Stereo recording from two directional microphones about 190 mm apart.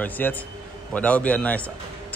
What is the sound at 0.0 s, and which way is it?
Speech, 10° left (ahead or behind).